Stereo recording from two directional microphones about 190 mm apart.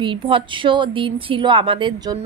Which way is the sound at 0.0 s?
25° right (ahead or behind).